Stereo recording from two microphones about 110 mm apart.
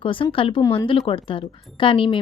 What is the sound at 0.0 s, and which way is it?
A woman's voice, 50° left (ahead or behind).